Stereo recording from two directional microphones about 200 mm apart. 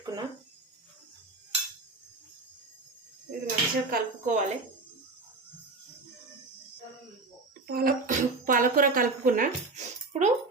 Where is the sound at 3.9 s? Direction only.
35° right (ahead or behind).